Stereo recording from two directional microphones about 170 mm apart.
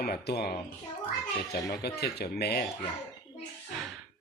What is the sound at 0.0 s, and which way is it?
Speech, 65° left (ahead or behind).